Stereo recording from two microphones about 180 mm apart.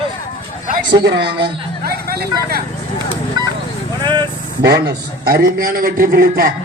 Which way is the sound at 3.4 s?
20° right (ahead or behind).